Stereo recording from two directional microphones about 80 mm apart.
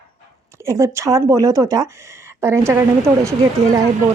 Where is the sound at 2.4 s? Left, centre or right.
Right.